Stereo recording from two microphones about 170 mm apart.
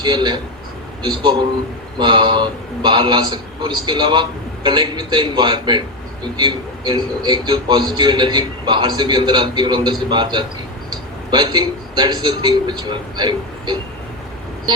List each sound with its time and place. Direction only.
0.0 s a man's voice: 25° right (ahead or behind)